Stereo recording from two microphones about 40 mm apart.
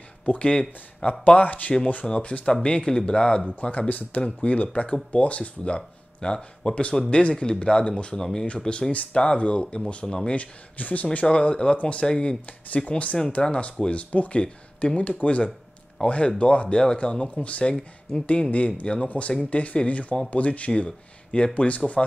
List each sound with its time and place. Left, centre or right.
0.4 s speech: left
1.2 s speech: left
2.0 s speech: left
4.4 s speech: left
5.8 s speech: left
10.3 s speech: left
11.2 s speech: left
12.1 s speech: left
12.7 s speech: left
17.4 s speech: left